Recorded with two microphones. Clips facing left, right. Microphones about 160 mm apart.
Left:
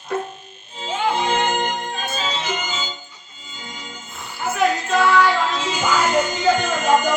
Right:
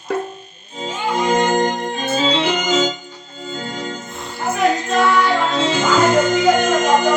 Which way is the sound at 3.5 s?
65° right (ahead or behind).